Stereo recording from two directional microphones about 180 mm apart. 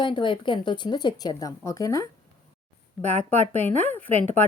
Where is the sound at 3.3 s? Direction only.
10° left (ahead or behind).